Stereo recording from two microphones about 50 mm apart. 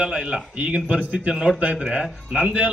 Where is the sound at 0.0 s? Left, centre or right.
Centre.